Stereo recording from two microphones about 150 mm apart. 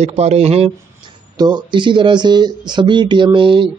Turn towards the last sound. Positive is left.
turn(degrees=-35)  # may be behind; listen again after turning